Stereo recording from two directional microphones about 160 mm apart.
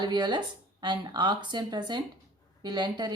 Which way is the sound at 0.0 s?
30° right (ahead or behind).